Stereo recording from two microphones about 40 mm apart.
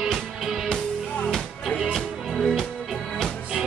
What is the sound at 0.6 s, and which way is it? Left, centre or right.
Music, centre.